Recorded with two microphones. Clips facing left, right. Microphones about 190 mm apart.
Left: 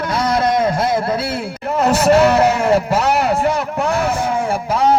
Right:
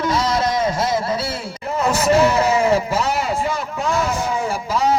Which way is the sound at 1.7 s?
60° left (ahead or behind).